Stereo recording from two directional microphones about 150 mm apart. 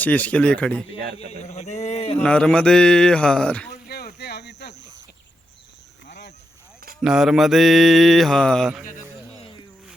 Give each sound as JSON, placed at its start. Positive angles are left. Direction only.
{"t": 0.0, "sound": "speech", "side_deg": 10}
{"t": 1.5, "sound": "speech", "side_deg": 50}
{"t": 2.2, "sound": "mantra", "side_deg": 5}
{"t": 3.7, "sound": "a sound", "side_deg": 90}
{"t": 4.6, "sound": "cricket", "side_deg": 90}
{"t": 7.0, "sound": "mantra", "side_deg": -5}